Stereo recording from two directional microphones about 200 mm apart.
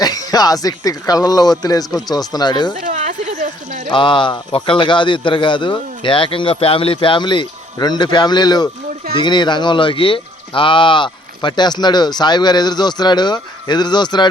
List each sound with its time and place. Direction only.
0.0 s speech: 20° left (ahead or behind)
2.7 s a sound: 40° right (ahead or behind)
3.9 s speech: 25° left (ahead or behind)